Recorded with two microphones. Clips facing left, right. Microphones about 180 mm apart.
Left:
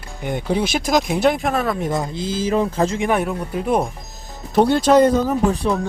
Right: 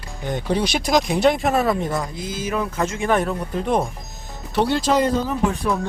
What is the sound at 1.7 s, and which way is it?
Speech, 20° left (ahead or behind).